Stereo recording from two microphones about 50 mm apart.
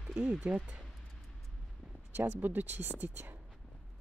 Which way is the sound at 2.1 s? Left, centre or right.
Right.